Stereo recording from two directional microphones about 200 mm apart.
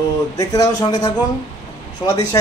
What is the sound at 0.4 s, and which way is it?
A man's voice, 15° left (ahead or behind).